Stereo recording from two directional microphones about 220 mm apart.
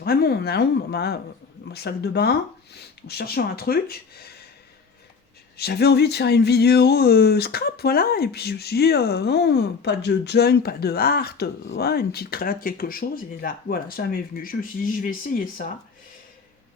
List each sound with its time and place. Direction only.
0.0 s speech: 45° left (ahead or behind)
5.5 s speech: 45° left (ahead or behind)